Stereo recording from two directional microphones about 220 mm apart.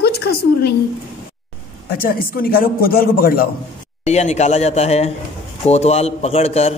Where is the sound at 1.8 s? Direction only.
40° left (ahead or behind).